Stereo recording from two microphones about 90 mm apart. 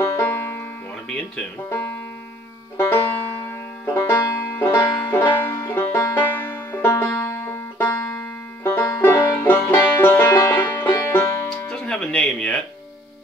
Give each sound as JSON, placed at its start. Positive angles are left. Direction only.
{"t": 0.0, "sound": "banjo", "side_deg": 30}
{"t": 1.0, "sound": "speech", "side_deg": 10}
{"t": 2.8, "sound": "banjo", "side_deg": 25}
{"t": 9.0, "sound": "music", "side_deg": 25}